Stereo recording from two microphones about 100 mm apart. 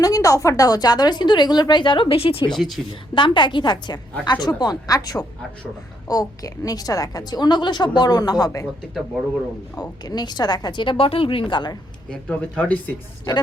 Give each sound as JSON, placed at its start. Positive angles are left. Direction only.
{"t": 0.0, "sound": "a woman's voice", "side_deg": 35}
{"t": 2.5, "sound": "speech", "side_deg": 0}
{"t": 2.9, "sound": "a woman's voice", "side_deg": 55}
{"t": 10.0, "sound": "a woman's voice", "side_deg": 45}
{"t": 12.1, "sound": "speech", "side_deg": 10}